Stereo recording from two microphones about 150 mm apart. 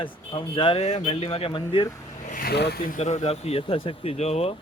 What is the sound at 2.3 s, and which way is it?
Speech, 75° left (ahead or behind).